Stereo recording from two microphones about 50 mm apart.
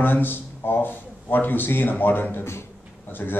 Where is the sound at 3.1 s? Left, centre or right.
Left.